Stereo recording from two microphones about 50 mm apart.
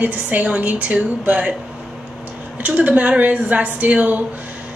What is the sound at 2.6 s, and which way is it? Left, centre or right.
Speech, right.